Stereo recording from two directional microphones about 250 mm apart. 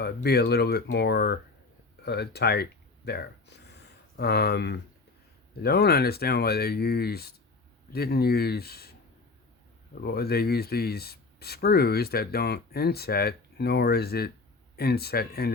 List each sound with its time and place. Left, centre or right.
0.0 s speech: left
10.0 s speech: left